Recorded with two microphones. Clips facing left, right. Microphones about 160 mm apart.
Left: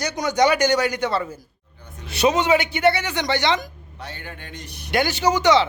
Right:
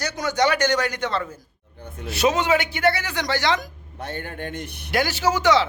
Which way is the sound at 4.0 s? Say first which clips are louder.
Right 6 dB; 50° right (ahead or behind).